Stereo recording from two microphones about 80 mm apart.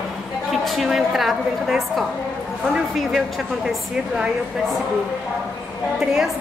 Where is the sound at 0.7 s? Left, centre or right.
Centre.